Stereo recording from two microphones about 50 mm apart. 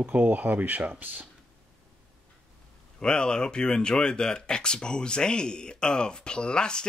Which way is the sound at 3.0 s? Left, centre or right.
Centre.